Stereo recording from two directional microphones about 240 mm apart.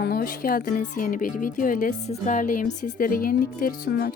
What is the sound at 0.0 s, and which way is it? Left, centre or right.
Speech, left.